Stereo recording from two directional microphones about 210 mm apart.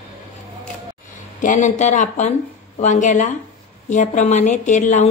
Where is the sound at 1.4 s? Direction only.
35° left (ahead or behind).